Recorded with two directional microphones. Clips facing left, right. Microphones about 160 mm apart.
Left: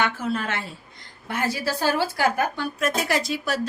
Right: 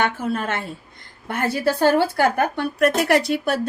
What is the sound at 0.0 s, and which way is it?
A woman's voice, 50° right (ahead or behind).